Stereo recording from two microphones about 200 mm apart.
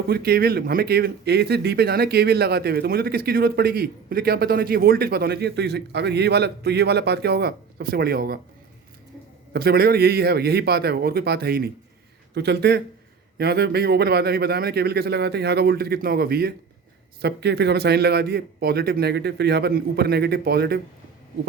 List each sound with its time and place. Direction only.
0.1 s speech: 50° right (ahead or behind)
9.5 s speech: 50° right (ahead or behind)